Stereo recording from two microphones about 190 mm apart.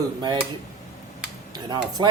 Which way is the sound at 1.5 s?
20° right (ahead or behind).